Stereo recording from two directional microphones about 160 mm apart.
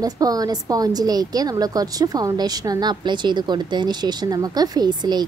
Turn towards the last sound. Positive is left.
turn(degrees=-25)  # may be behind; listen again after turning